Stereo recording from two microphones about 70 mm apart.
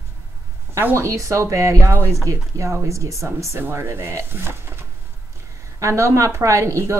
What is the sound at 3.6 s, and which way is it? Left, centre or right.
A woman's voice, right.